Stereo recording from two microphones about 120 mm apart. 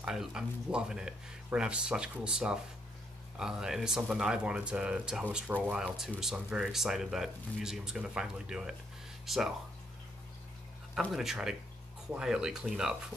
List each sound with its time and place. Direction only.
0.0 s speech: 5° right (ahead or behind)
11.1 s speech: 5° right (ahead or behind)